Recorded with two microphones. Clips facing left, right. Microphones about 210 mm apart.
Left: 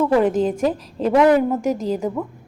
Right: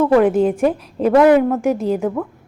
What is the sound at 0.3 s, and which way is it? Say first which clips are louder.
A woman's voice: right 4 dB; 10° right (ahead or behind).